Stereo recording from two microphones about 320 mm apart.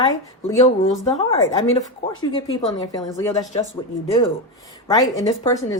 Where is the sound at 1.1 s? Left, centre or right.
Centre.